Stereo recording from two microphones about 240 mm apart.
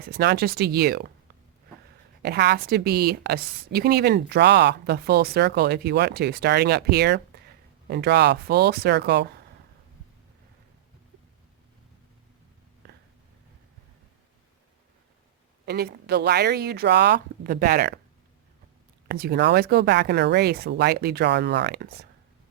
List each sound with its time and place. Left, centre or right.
0.0 s a woman's voice: right
2.2 s a woman's voice: right
15.6 s a woman's voice: right
19.0 s speech: right